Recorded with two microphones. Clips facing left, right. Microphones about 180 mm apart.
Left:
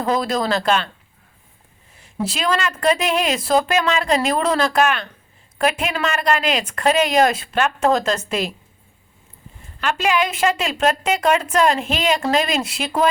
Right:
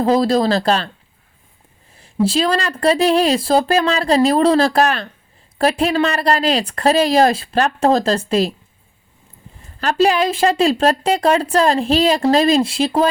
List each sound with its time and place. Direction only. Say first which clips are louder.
0.0 s a woman's voice: right 6 dB; 30° right (ahead or behind)
2.0 s a woman's voice: right 8 dB; 30° right (ahead or behind)
9.8 s a woman's voice: right 5 dB; 35° right (ahead or behind)